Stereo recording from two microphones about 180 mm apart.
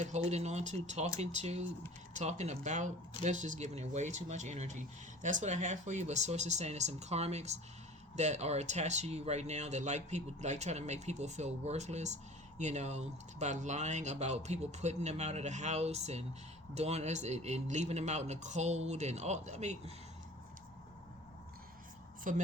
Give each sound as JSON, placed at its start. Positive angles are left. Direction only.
{"t": 0.0, "sound": "speech", "side_deg": -40}
{"t": 22.3, "sound": "speech", "side_deg": -45}